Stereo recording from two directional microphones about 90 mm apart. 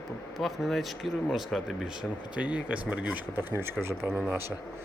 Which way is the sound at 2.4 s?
15° right (ahead or behind).